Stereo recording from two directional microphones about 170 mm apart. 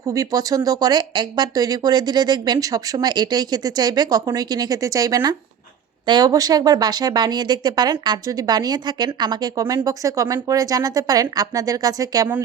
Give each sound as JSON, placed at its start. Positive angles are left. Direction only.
{"t": 0.0, "sound": "speech", "side_deg": -20}